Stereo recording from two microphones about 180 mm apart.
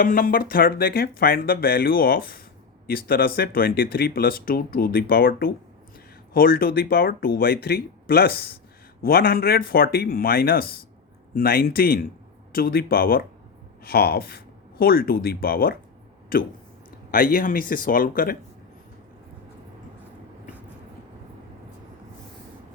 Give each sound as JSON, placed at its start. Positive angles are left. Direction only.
{"t": 0.0, "sound": "speech", "side_deg": 50}